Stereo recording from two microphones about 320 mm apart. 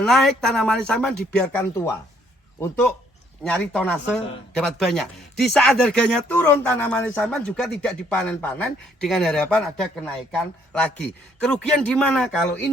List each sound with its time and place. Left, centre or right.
0.0 s speech: centre
3.4 s speech: centre